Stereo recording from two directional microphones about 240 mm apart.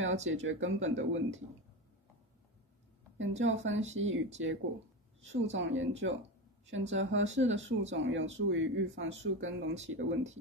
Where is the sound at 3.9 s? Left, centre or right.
Right.